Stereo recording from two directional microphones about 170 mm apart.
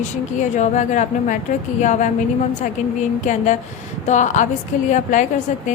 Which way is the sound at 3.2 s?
45° left (ahead or behind).